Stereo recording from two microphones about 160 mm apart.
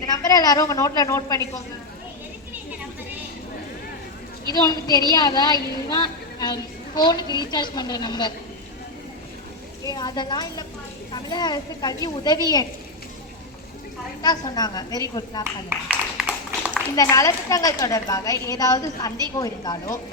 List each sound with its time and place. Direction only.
0.0 s a woman's voice: 25° left (ahead or behind)
4.5 s a woman's voice: 25° left (ahead or behind)
9.8 s a woman's voice: 25° left (ahead or behind)
14.2 s a woman's voice: 25° left (ahead or behind)
15.7 s a sound: 10° right (ahead or behind)
16.9 s a woman's voice: 20° left (ahead or behind)